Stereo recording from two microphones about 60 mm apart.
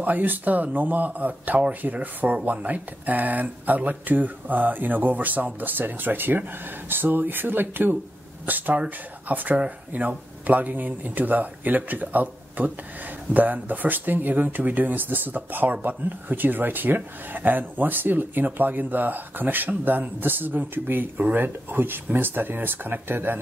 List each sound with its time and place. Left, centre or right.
0.0 s speech: right